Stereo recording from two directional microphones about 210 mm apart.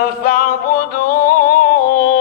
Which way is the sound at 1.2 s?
40° left (ahead or behind).